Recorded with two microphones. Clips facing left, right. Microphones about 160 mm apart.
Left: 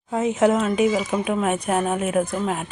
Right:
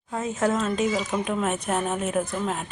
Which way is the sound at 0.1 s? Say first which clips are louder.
Left 6 dB; 20° left (ahead or behind).